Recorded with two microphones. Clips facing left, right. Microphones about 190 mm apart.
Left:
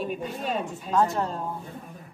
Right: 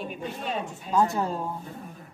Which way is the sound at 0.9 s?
Centre (ahead or behind).